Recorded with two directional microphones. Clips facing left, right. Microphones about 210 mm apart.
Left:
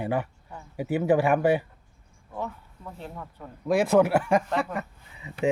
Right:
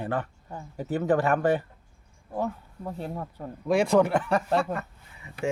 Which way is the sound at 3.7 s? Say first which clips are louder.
Left 1 dB; 5° left (ahead or behind).